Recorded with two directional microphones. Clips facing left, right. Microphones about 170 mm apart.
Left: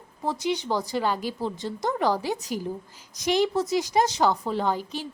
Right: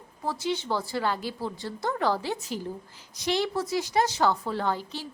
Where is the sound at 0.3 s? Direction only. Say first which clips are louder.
Left 2 dB; 15° left (ahead or behind).